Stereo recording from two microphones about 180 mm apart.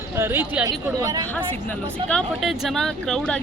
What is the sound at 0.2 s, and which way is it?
Speech, 10° right (ahead or behind).